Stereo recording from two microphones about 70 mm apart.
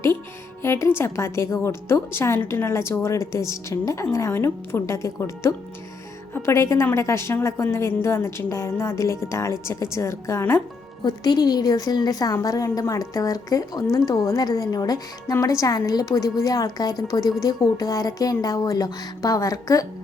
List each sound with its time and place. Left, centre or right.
0.6 s a woman's voice: left
11.0 s a woman's voice: left